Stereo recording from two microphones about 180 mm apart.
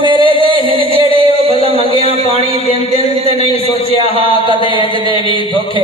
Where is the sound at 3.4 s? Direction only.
35° left (ahead or behind).